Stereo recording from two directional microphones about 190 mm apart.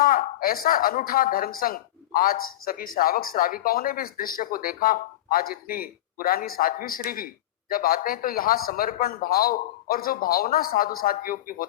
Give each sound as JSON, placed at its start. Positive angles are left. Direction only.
{"t": 0.0, "sound": "speech", "side_deg": 50}